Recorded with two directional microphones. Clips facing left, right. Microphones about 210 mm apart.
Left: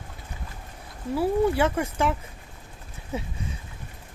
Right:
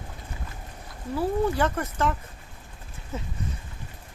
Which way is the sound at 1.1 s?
10° left (ahead or behind).